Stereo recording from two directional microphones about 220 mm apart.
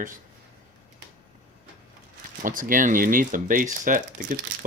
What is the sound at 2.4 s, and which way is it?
Speech, 40° right (ahead or behind).